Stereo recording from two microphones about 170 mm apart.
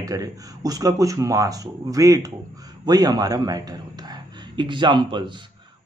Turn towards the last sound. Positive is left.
turn(degrees=-30)  # may be behind; listen again after turning